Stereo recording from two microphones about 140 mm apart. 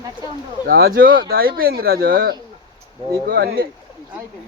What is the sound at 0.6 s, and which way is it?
Speech, 90° right.